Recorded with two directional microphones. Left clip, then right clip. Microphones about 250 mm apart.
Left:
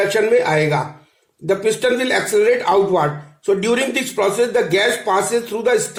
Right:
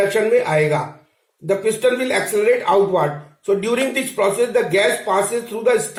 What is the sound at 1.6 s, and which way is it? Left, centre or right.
A man's voice, left.